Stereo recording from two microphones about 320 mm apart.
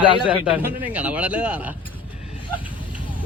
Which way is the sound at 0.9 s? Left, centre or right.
Centre.